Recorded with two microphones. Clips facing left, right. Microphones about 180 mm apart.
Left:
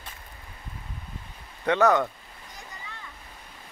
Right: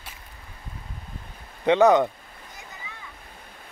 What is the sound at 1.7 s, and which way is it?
Speech, 20° right (ahead or behind).